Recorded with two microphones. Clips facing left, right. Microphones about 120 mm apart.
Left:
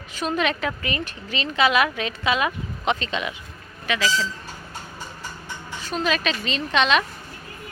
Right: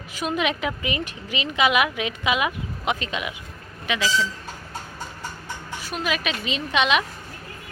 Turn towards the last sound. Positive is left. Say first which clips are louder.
# left 1 dB
turn(degrees=-10)  # may be behind; listen again after turning